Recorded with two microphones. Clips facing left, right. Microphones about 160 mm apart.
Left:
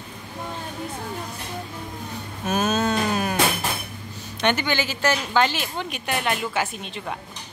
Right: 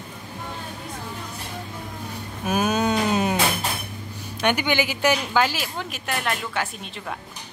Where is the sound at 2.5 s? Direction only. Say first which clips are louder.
Right 1 dB; 10° right (ahead or behind).